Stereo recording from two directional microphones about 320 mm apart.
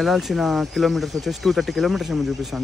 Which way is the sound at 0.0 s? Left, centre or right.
Centre.